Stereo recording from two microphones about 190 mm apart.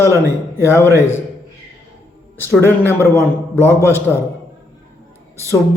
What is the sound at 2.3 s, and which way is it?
Speech, 10° left (ahead or behind).